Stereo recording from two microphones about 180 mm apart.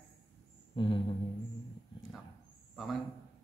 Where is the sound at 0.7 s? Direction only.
25° left (ahead or behind).